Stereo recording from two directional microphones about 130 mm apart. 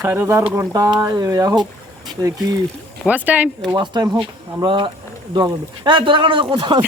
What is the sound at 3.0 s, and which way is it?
Speech, 10° right (ahead or behind).